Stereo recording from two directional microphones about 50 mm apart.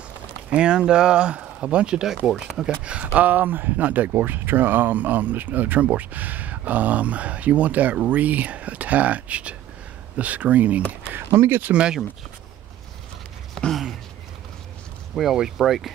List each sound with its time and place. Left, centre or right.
0.5 s speech: centre
3.2 s speech: right
11.1 s speech: right
11.7 s speech: centre
15.3 s speech: centre